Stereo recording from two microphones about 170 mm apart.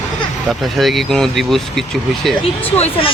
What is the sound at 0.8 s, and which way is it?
Speech, centre (ahead or behind).